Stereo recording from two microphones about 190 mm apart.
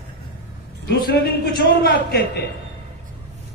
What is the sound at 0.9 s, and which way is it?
A man's voice, 50° left (ahead or behind).